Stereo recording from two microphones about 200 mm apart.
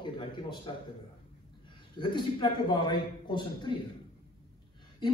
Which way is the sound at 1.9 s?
20° left (ahead or behind).